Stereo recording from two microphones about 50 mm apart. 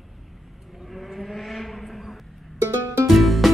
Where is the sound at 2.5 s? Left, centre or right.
Right.